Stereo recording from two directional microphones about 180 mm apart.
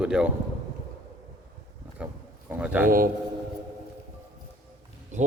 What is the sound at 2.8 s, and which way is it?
Speech, 50° right (ahead or behind).